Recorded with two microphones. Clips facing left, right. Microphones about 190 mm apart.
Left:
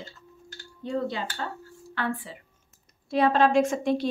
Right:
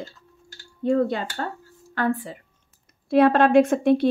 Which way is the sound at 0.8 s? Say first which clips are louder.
Right 8 dB; 50° right (ahead or behind).